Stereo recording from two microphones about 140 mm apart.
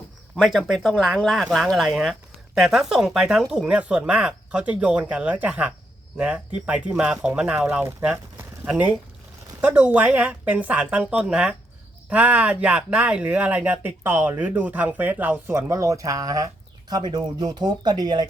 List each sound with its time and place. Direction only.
0.3 s speech: centre (ahead or behind); by 18.3 s 30° right (ahead or behind)